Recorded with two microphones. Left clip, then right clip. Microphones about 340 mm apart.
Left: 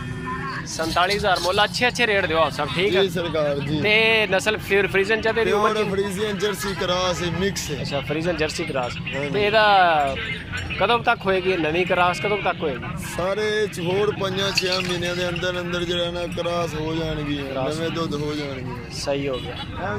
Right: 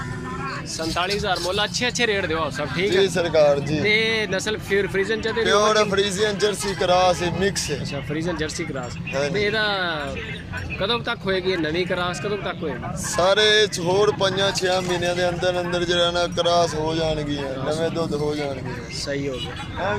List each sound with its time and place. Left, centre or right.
0.9 s speech: centre
2.9 s speech: right
3.8 s speech: centre
5.5 s speech: right
8.1 s speech: centre
13.1 s speech: right